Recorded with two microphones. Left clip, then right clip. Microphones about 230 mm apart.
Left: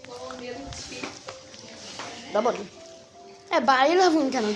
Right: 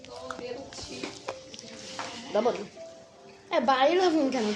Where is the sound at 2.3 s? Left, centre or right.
Centre.